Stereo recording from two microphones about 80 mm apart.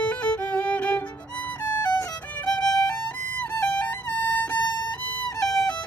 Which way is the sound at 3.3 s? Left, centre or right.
Left.